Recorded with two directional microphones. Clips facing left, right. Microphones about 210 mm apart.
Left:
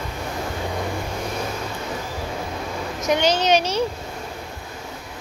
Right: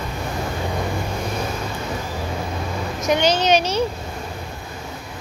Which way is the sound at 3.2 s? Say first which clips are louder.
Right 1 dB; 20° right (ahead or behind).